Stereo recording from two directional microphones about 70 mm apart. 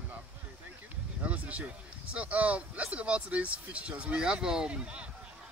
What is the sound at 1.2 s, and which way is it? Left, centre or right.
Speech, centre.